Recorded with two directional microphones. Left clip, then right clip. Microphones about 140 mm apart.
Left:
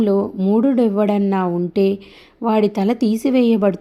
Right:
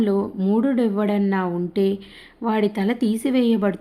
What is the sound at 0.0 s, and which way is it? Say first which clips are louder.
A woman's voice: left 4 dB; 30° left (ahead or behind).